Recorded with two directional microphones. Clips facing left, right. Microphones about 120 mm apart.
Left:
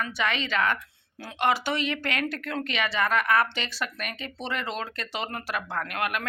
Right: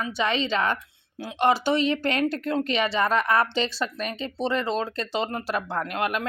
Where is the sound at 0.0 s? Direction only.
30° right (ahead or behind).